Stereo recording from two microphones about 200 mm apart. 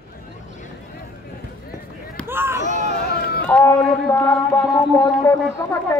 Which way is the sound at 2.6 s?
35° right (ahead or behind).